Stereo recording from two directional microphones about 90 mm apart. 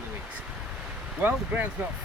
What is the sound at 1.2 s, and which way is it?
Speech, 20° right (ahead or behind).